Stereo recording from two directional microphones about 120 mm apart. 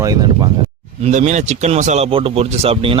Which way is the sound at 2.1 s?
50° right (ahead or behind).